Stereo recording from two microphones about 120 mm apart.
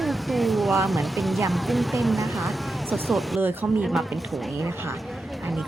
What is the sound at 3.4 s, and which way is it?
Speech, 15° right (ahead or behind).